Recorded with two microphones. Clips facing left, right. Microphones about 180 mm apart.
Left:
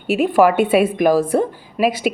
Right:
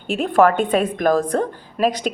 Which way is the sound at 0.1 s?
5° left (ahead or behind).